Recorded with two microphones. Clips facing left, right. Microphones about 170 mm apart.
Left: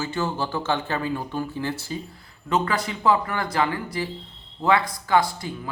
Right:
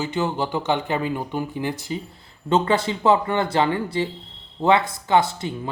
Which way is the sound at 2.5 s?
25° right (ahead or behind).